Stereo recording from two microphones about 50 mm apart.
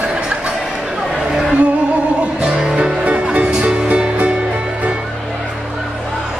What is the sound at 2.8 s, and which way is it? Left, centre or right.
Music, right.